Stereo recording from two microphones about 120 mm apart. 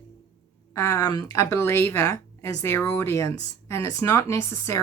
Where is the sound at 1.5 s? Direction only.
20° left (ahead or behind).